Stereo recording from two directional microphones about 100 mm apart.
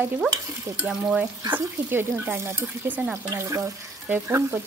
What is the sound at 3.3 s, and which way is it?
Frying, 30° right (ahead or behind).